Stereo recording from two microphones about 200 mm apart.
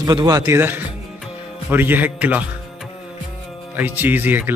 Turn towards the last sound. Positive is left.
turn(degrees=-10)  # may be behind; listen again after turning